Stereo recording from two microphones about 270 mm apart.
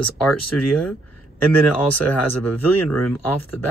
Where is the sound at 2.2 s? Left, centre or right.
Left.